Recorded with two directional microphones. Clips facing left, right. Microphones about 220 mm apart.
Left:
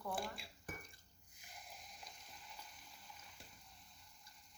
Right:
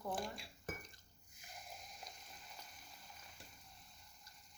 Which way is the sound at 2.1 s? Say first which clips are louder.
Right 3 dB; 45° right (ahead or behind).